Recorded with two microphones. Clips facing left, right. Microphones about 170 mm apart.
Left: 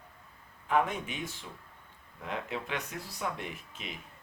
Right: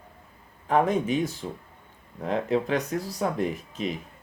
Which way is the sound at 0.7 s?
40° right (ahead or behind).